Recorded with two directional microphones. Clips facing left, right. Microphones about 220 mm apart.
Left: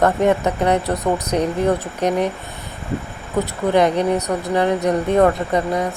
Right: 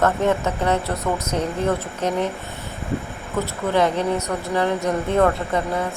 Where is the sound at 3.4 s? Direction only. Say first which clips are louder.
Left 4 dB; 15° left (ahead or behind).